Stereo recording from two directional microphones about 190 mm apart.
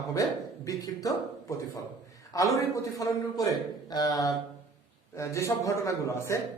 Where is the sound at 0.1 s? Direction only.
15° left (ahead or behind).